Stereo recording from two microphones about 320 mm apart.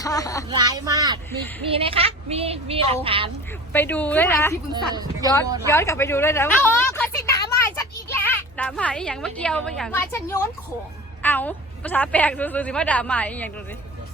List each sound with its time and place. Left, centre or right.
0.0 s speech: centre
0.5 s a woman's voice: centre
3.7 s a woman's voice: centre
4.7 s a woman's voice: centre
5.6 s a woman's voice: centre